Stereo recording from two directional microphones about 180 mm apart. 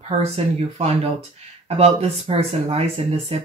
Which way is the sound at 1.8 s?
35° right (ahead or behind).